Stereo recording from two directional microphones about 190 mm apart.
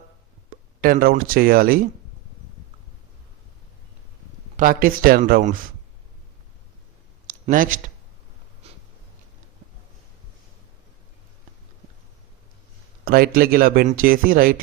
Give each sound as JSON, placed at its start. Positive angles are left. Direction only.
{"t": 0.8, "sound": "speech", "side_deg": -50}
{"t": 4.5, "sound": "speech", "side_deg": -45}
{"t": 7.4, "sound": "speech", "side_deg": -45}
{"t": 8.6, "sound": "snort", "side_deg": -35}
{"t": 13.1, "sound": "speech", "side_deg": -50}